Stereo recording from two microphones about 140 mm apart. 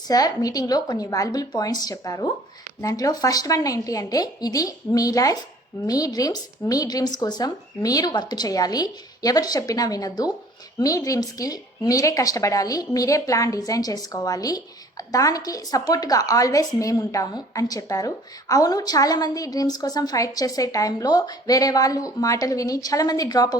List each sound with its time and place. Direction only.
0.1 s speech: 25° left (ahead or behind)